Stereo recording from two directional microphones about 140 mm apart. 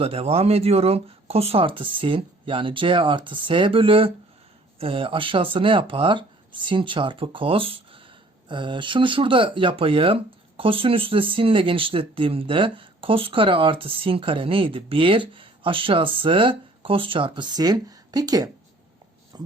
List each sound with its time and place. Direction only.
0.0 s speech: 45° right (ahead or behind); by 18.4 s 25° right (ahead or behind)